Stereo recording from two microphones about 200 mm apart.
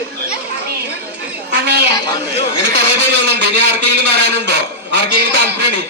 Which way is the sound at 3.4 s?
55° right (ahead or behind).